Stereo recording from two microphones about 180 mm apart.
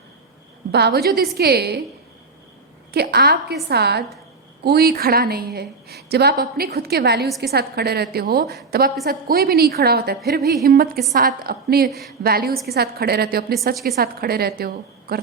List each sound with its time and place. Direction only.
0.7 s a woman's voice: 65° right (ahead or behind)
2.9 s a woman's voice: 60° right (ahead or behind)
11.9 s speech: centre (ahead or behind)
12.2 s a woman's voice: 55° right (ahead or behind)